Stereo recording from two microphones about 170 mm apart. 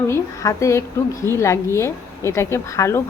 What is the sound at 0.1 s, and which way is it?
A woman's voice, 20° left (ahead or behind).